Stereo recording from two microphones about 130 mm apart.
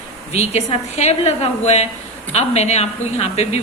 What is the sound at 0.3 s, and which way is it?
A woman's voice, 55° left (ahead or behind).